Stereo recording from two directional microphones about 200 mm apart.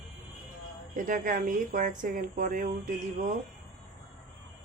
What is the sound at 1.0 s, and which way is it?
A woman's voice, 45° right (ahead or behind).